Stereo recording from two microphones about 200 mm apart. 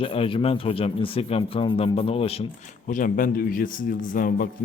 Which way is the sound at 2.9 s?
40° left (ahead or behind).